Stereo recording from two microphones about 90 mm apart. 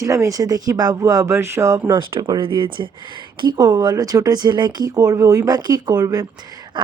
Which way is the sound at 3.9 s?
40° right (ahead or behind).